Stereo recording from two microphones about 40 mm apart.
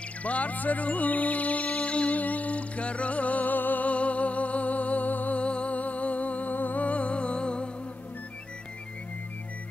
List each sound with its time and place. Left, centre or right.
0.2 s music: left
3.8 s music: left
5.4 s music: left